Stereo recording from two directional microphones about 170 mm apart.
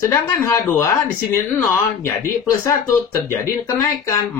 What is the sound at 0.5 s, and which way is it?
Speech, 15° left (ahead or behind).